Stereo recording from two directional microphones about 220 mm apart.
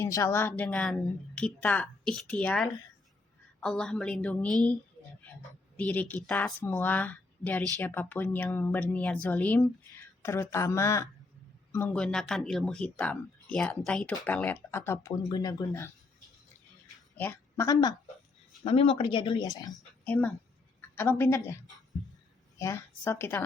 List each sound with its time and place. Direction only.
0.0 s a woman's voice: 15° left (ahead or behind)
17.2 s a woman's voice: 10° left (ahead or behind)
18.6 s speech: 25° left (ahead or behind)
20.9 s a woman's voice: 10° left (ahead or behind)
22.5 s a woman's voice: 10° left (ahead or behind)